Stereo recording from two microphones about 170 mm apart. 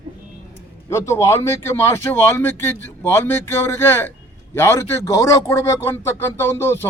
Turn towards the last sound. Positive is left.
turn(degrees=15)  # may be behind; listen again after turning